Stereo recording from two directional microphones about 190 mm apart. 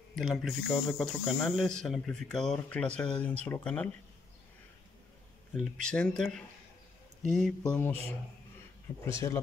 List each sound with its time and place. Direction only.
0.1 s speech: centre (ahead or behind)
5.6 s speech: 5° left (ahead or behind)
9.0 s speech: 15° left (ahead or behind)